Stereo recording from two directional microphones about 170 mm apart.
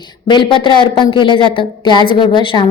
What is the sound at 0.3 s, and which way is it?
A woman's voice, 30° left (ahead or behind).